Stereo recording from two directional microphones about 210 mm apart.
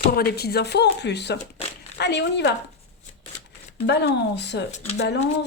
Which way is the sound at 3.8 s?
55° left (ahead or behind).